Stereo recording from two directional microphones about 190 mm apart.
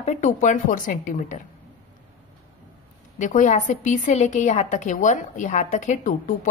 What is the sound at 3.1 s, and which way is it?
A woman's voice, 40° left (ahead or behind).